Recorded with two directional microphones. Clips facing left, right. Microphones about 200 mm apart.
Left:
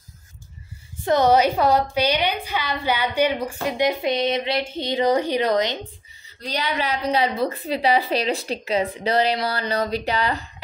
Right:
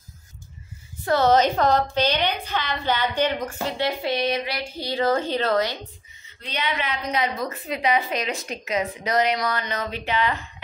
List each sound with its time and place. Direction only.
1.0 s a woman's voice: 15° left (ahead or behind)
6.2 s a woman's voice: 35° left (ahead or behind)